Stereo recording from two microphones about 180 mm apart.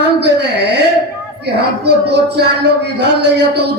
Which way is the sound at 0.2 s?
65° right (ahead or behind).